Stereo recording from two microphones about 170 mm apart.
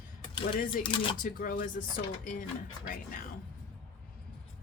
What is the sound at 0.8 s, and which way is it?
Mechanisms, 30° left (ahead or behind).